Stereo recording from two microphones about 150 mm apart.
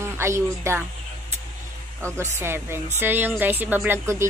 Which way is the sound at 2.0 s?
15° right (ahead or behind).